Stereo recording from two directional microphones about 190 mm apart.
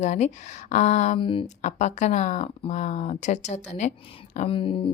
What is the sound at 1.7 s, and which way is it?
A woman's voice, 40° left (ahead or behind).